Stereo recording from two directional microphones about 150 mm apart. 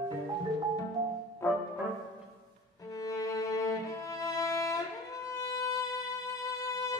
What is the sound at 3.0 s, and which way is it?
Music, 25° left (ahead or behind).